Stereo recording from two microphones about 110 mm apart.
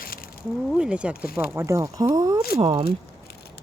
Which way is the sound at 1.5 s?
30° right (ahead or behind).